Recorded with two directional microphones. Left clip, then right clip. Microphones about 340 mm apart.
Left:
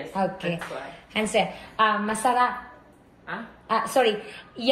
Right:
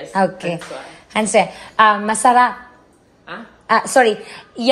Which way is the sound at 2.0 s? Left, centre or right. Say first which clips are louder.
Right 10 dB; right.